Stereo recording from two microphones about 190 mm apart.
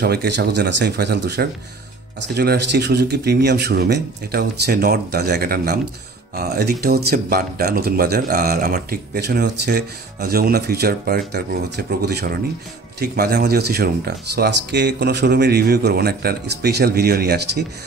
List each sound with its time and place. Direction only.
0.0 s speech: 60° right (ahead or behind)